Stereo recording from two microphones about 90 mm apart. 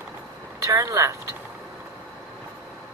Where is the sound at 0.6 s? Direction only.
35° right (ahead or behind).